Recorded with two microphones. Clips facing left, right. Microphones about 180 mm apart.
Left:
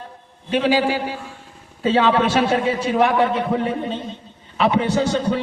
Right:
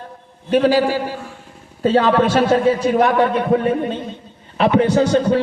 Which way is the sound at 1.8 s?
45° right (ahead or behind).